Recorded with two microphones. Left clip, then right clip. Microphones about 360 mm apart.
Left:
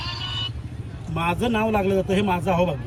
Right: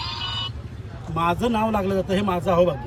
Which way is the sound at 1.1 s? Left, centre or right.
Centre.